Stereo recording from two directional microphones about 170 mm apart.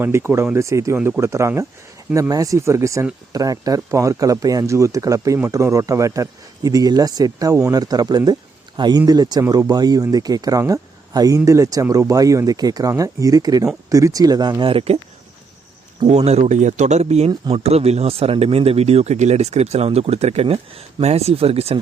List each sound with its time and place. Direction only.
0.0 s speech: 15° right (ahead or behind); by 14.9 s 35° right (ahead or behind)
16.0 s speech: 40° right (ahead or behind)